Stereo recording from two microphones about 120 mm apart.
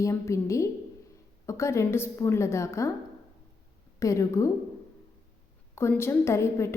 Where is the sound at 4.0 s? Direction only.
25° left (ahead or behind).